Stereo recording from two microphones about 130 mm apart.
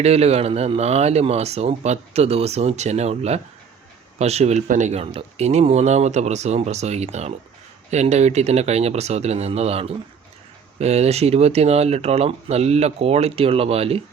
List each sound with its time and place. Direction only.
0.0 s speech: 55° right (ahead or behind)